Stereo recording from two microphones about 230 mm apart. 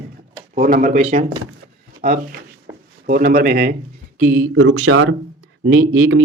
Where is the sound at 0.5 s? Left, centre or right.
Right.